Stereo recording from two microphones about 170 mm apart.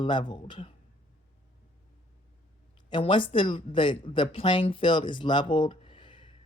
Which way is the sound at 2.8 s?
30° left (ahead or behind).